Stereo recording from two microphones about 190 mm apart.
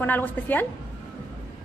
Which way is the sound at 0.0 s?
10° left (ahead or behind).